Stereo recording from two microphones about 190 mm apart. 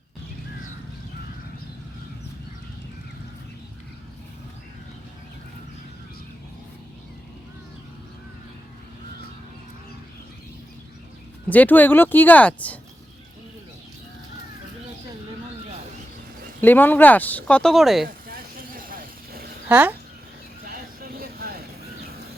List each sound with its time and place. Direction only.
11.4 s speech: 10° left (ahead or behind)
16.6 s speech: 10° left (ahead or behind)
18.3 s vehicle: 50° right (ahead or behind)
19.6 s speech: 10° right (ahead or behind)
20.7 s vehicle: 50° right (ahead or behind)